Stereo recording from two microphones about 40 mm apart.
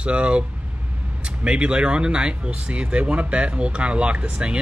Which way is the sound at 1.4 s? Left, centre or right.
Right.